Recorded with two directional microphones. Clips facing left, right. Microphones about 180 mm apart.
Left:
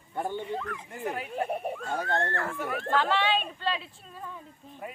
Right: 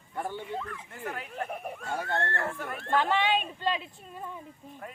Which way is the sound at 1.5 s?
30° left (ahead or behind).